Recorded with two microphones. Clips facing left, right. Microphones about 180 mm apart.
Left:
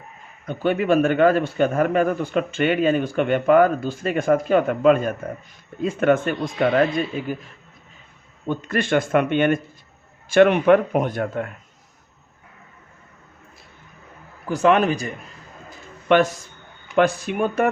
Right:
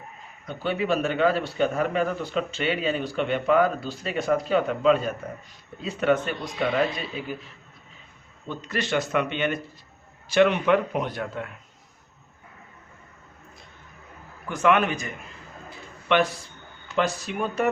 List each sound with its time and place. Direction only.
0.4 s a man's voice: 50° left (ahead or behind)
8.4 s a man's voice: 50° left (ahead or behind)
14.4 s speech: 35° left (ahead or behind)
15.7 s a sound: 45° left (ahead or behind)
16.9 s speech: 55° left (ahead or behind)